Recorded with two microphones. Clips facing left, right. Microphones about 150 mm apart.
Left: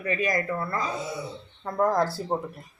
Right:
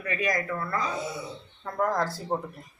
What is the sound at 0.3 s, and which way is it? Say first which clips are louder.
Speech: left 1 dB; 25° left (ahead or behind).